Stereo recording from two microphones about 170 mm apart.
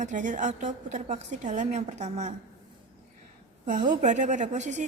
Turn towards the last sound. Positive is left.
turn(degrees=-45)  # may be behind; listen again after turning